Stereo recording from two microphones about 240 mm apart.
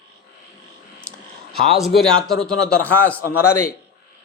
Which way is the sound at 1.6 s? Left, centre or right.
Centre.